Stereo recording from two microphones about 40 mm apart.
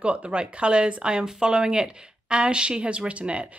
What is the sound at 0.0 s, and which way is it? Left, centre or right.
A woman's voice, right.